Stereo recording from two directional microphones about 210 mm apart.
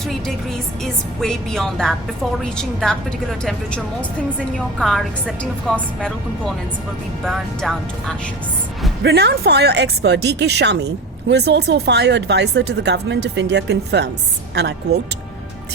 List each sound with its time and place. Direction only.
0.0 s a woman's voice: centre (ahead or behind)
9.0 s a woman's voice: 50° right (ahead or behind)